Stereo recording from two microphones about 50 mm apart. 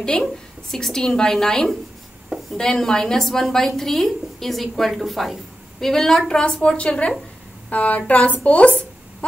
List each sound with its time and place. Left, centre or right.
0.0 s a woman's voice: centre